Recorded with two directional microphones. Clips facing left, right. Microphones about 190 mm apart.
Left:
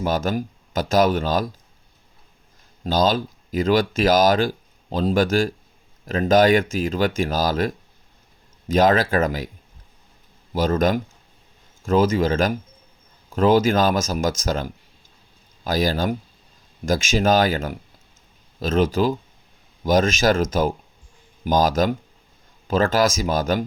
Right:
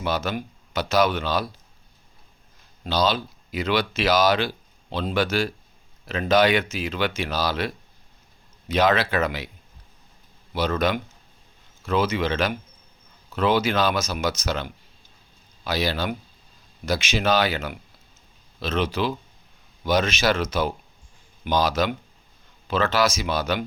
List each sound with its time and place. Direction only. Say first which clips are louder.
0.0 s speech: left 4 dB; 45° left (ahead or behind)
2.8 s speech: left 3 dB; 45° left (ahead or behind)
10.5 s speech: left 4 dB; 45° left (ahead or behind)